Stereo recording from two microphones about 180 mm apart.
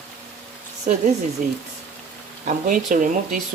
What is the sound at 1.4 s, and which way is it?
Speech, 45° right (ahead or behind).